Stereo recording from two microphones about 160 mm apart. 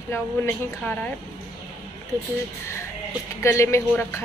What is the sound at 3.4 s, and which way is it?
Speech, 20° left (ahead or behind).